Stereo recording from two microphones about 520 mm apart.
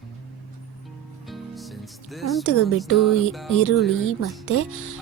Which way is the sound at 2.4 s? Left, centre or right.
Left.